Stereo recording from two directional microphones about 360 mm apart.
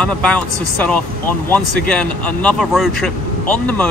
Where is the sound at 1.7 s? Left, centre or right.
Right.